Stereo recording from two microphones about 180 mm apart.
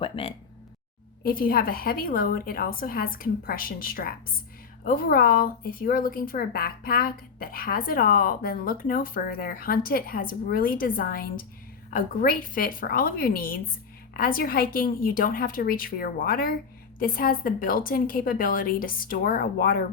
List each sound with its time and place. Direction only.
0.0 s speech: 30° left (ahead or behind)
1.2 s a woman's voice: 50° left (ahead or behind)